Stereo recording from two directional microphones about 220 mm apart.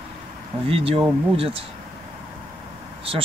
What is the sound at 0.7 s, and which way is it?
Speech, 25° right (ahead or behind).